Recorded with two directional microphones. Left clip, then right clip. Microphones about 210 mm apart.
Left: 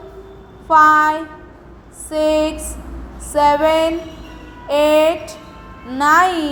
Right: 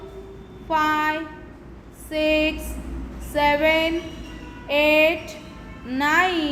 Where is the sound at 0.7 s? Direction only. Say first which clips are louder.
Left 10 dB; 10° left (ahead or behind).